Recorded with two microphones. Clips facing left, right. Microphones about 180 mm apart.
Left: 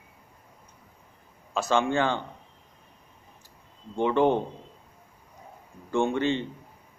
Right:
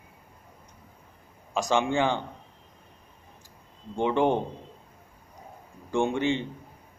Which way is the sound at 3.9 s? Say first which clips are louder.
Left 1 dB; 15° right (ahead or behind).